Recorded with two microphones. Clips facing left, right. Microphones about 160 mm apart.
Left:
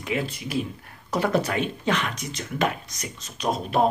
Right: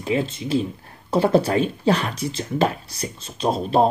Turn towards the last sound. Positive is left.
turn(degrees=-30)  # may be behind; listen again after turning